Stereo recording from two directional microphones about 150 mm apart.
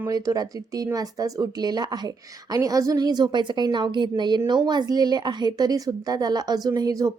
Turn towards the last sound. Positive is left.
turn(degrees=-25)  # may be behind; listen again after turning